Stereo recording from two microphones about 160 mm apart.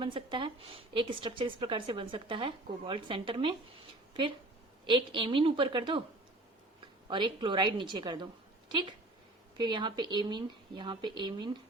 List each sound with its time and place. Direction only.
0.0 s a woman's voice: 30° right (ahead or behind)
4.9 s a woman's voice: 30° right (ahead or behind)
7.1 s a woman's voice: 30° right (ahead or behind)